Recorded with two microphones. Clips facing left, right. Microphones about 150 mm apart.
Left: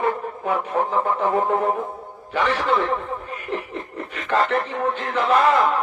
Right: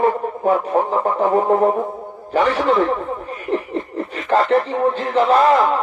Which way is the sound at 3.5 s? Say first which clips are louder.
Right 8 dB; 35° right (ahead or behind).